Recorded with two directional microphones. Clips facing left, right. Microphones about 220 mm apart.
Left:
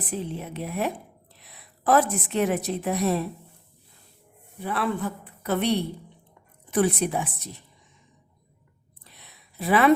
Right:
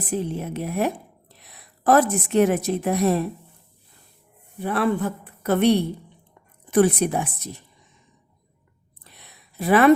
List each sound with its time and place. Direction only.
0.1 s a woman's voice: 45° right (ahead or behind)
4.6 s a woman's voice: 50° right (ahead or behind)
9.1 s a sound: 50° right (ahead or behind)